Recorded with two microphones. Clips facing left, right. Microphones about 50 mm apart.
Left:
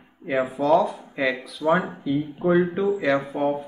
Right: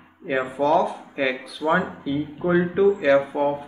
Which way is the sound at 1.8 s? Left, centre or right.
Right.